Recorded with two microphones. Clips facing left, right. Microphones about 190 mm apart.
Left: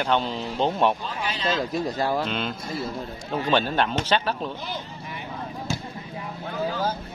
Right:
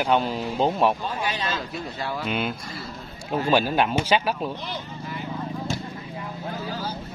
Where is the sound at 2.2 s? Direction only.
10° right (ahead or behind).